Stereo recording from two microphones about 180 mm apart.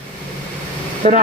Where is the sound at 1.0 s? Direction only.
35° right (ahead or behind).